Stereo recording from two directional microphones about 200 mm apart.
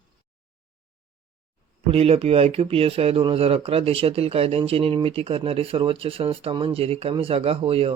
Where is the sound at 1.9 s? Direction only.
30° right (ahead or behind).